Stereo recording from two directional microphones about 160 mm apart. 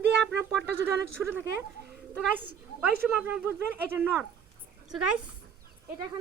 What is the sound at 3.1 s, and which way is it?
Speech, 5° right (ahead or behind).